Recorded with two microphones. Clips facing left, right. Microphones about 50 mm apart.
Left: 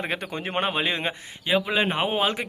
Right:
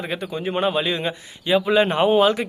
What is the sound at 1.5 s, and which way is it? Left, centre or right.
Speech, centre.